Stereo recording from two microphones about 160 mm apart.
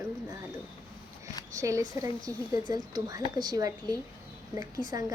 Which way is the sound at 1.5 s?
20° right (ahead or behind).